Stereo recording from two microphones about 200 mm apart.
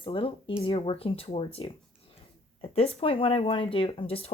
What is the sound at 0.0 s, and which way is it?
Speech, 25° left (ahead or behind).